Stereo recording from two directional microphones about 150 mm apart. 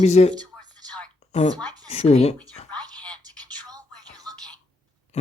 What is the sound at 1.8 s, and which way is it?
Speech, 45° left (ahead or behind).